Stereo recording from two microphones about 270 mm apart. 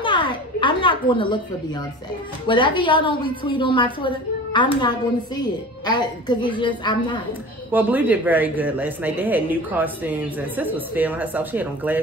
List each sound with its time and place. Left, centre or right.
0.0 s a sound: centre
2.4 s a woman's voice: centre
7.7 s speech: centre